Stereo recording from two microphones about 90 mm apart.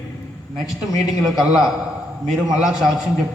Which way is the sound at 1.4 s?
10° right (ahead or behind).